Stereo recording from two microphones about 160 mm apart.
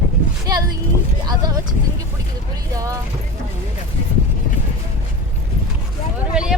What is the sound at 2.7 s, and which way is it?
Speech, 20° right (ahead or behind).